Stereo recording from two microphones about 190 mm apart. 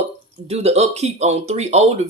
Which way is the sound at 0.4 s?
35° right (ahead or behind).